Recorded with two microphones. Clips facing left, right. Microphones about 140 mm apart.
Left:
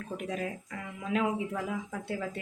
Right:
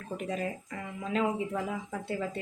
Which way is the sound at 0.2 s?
Centre (ahead or behind).